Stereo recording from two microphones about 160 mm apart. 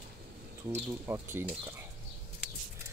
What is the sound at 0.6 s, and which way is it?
Speech, 15° right (ahead or behind).